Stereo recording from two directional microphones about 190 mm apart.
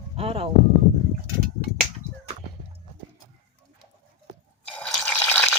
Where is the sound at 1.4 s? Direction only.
50° right (ahead or behind).